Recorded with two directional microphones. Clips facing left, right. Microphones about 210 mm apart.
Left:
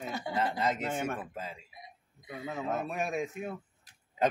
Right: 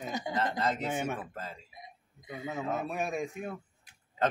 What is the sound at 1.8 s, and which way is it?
Hiccup, 20° right (ahead or behind).